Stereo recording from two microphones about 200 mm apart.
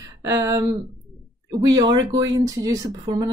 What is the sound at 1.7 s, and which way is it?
Speech, 20° right (ahead or behind).